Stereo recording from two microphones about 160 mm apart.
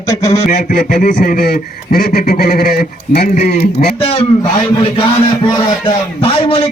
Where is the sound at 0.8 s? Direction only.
55° left (ahead or behind); by 3.3 s 75° left (ahead or behind).